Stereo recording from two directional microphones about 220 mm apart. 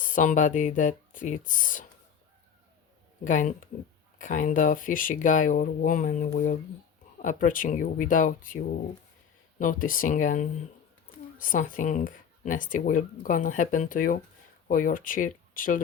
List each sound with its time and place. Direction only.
0.0 s speech: 35° left (ahead or behind)
3.2 s speech: 35° left (ahead or behind)